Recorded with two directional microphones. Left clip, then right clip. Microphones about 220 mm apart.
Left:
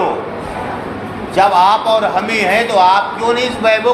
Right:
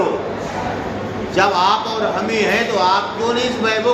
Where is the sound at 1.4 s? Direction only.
15° left (ahead or behind).